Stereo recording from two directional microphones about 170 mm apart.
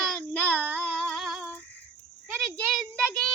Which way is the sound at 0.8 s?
5° left (ahead or behind).